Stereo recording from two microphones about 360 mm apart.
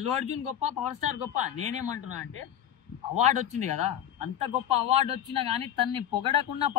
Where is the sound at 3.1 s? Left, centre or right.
Centre.